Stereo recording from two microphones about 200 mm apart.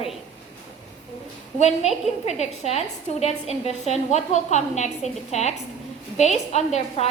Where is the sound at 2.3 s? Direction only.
30° left (ahead or behind).